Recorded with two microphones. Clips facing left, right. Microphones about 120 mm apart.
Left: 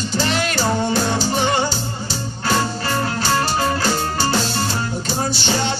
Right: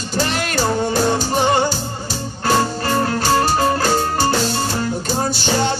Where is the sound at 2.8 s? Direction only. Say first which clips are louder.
Right 3 dB; 50° right (ahead or behind).